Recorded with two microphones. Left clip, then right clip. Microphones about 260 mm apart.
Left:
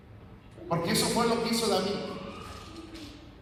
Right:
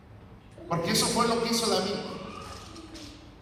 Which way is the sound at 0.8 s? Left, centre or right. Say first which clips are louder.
Right 2 dB; centre.